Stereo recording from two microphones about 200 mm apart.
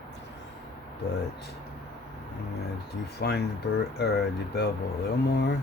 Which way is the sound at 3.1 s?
55° left (ahead or behind).